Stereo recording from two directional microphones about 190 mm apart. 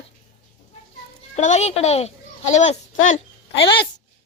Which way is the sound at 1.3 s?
35° left (ahead or behind).